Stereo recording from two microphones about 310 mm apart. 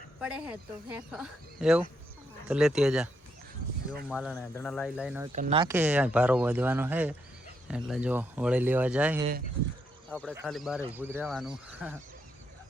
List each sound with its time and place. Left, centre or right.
0.2 s speech: centre
4.1 s speech: centre
5.3 s speech: right
5.6 s speech: centre